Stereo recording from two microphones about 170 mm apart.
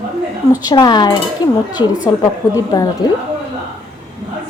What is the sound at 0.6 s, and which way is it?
Speech, 25° left (ahead or behind).